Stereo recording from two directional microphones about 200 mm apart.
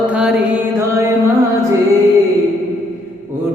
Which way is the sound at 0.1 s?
5° right (ahead or behind).